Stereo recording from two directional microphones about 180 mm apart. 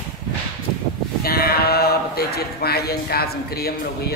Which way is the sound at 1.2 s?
60° left (ahead or behind).